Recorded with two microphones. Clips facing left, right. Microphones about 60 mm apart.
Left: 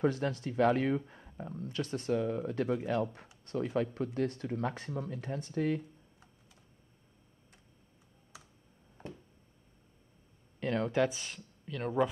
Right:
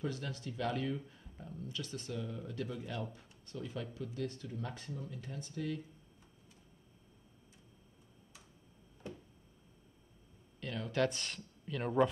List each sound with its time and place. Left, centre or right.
0.0 s speech: left
4.6 s speech: left
4.9 s speech: left
5.3 s speech: left
9.0 s a sound: left
10.6 s a sound: left
11.0 s speech: centre